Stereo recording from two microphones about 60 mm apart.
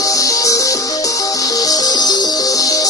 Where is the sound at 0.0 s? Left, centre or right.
Left.